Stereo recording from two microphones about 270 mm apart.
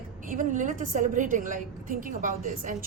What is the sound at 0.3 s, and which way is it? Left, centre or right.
A woman's voice, right.